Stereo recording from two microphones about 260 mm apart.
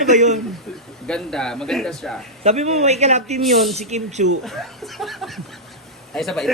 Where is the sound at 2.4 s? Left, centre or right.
Right.